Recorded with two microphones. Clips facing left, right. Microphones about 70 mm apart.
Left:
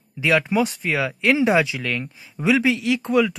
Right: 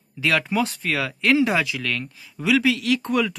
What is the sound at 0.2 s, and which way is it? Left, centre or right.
Speech, centre.